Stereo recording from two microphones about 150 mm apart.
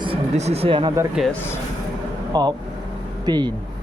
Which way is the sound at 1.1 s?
Centre (ahead or behind).